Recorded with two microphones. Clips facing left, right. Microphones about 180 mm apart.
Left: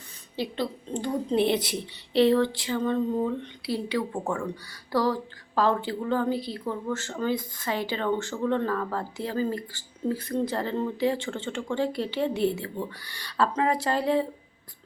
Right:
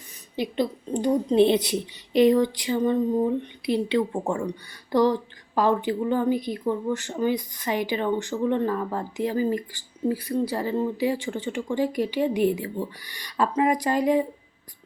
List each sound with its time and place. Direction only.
0.3 s a woman's voice: 20° right (ahead or behind)